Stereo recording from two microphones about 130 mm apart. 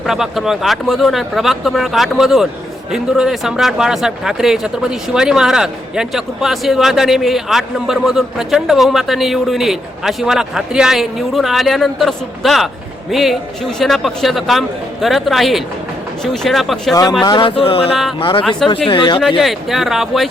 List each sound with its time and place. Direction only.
0.0 s speech: centre (ahead or behind)
16.9 s a man's voice: 30° left (ahead or behind)
19.4 s speech: centre (ahead or behind)